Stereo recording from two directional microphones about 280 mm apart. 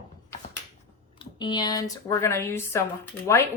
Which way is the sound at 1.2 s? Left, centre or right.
Centre.